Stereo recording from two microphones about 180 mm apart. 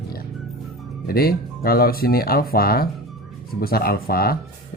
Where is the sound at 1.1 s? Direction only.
55° left (ahead or behind).